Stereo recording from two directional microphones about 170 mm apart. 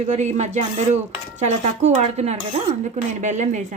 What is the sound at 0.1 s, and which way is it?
Speech, 45° right (ahead or behind).